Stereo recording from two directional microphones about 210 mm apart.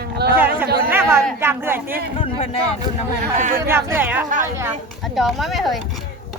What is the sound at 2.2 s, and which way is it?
Speech, 30° left (ahead or behind).